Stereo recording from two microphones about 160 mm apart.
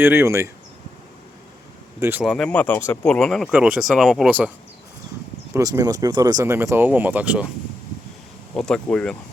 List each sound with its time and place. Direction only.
0.0 s speech: 15° right (ahead or behind)
2.0 s speech: 15° right (ahead or behind)
2.2 s speech: 5° left (ahead or behind)
5.5 s speech: 20° right (ahead or behind)
8.5 s speech: 5° left (ahead or behind)